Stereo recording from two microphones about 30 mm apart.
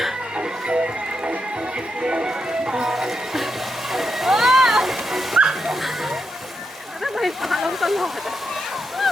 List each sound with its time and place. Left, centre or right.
0.3 s music: right
2.9 s music: centre
3.9 s bow-wow: centre
5.5 s dog: centre
7.0 s a sound: centre